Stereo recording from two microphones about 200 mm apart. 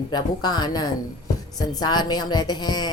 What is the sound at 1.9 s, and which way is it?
A woman's voice, 20° left (ahead or behind).